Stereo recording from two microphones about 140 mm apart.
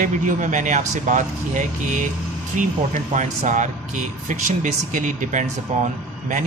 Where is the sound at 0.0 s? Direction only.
65° right (ahead or behind).